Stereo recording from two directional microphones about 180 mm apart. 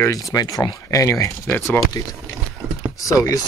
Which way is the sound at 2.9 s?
20° left (ahead or behind).